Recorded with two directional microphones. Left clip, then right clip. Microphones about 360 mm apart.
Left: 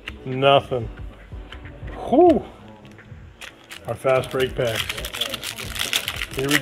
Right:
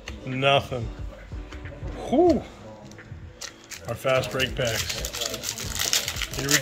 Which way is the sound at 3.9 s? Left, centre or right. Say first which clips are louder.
Left 4 dB; left.